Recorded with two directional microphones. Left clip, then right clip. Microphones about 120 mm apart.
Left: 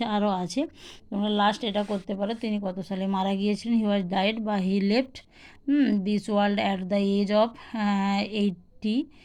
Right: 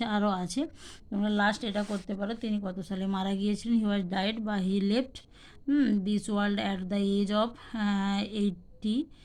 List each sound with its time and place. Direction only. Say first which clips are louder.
0.0 s a woman's voice: left 4 dB; 15° left (ahead or behind)